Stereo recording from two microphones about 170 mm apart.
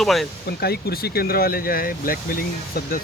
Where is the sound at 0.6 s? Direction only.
70° left (ahead or behind).